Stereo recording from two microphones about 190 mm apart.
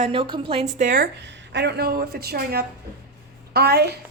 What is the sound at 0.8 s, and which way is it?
A woman's voice, 50° right (ahead or behind).